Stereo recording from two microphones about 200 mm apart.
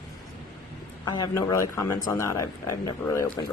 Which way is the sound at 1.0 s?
20° left (ahead or behind).